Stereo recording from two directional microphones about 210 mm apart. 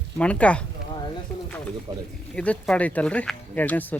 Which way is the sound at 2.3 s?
5° left (ahead or behind).